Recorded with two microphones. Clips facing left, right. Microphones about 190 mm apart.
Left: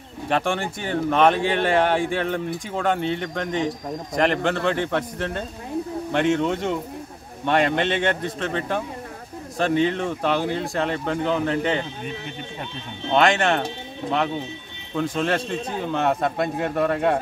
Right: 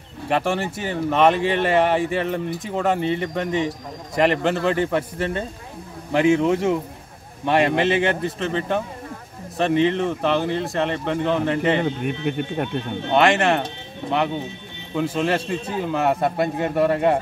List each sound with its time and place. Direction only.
0.3 s speech: 5° right (ahead or behind)
11.8 s speech: 60° right (ahead or behind)
13.1 s speech: 5° right (ahead or behind)
15.0 s speech: 5° right (ahead or behind)